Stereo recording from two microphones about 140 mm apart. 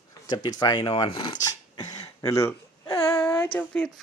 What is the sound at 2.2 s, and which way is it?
Speech, 20° left (ahead or behind).